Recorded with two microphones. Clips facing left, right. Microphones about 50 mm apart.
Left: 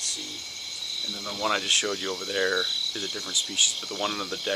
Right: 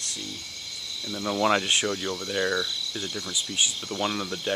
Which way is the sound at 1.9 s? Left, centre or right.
Centre.